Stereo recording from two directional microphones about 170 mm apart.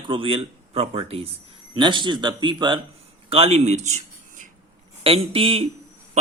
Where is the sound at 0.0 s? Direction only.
30° right (ahead or behind).